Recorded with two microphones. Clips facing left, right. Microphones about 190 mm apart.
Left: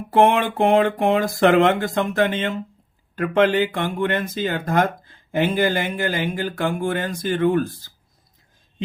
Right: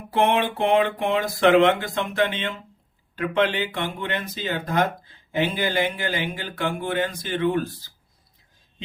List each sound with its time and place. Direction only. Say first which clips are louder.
0.1 s speech: left 4 dB; 50° left (ahead or behind)